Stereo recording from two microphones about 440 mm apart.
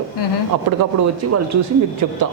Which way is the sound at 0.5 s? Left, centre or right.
Right.